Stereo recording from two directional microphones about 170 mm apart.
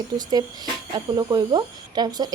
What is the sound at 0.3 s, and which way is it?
Speech, 25° right (ahead or behind).